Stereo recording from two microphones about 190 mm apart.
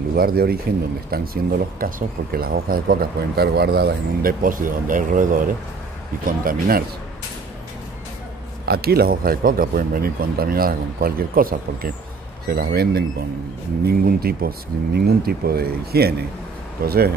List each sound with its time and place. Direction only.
0.1 s speech: 50° right (ahead or behind)
8.6 s speech: 55° right (ahead or behind)